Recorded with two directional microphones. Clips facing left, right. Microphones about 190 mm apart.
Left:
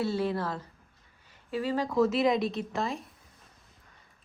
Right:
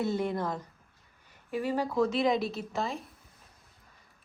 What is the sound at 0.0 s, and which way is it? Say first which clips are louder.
A woman's voice: left 1 dB; 15° right (ahead or behind).